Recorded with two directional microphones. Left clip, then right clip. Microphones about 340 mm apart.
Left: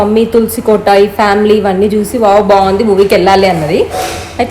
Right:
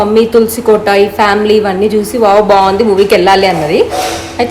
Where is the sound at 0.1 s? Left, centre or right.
Centre.